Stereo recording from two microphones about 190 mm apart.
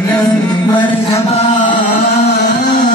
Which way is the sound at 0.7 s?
30° left (ahead or behind).